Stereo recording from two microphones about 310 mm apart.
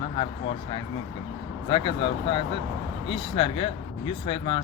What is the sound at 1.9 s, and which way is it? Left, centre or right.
Speech, centre.